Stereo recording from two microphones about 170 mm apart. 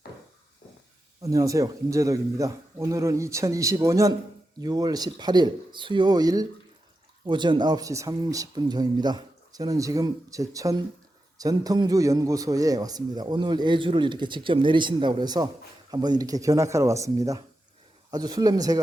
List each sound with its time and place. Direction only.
1.2 s speech: 20° right (ahead or behind)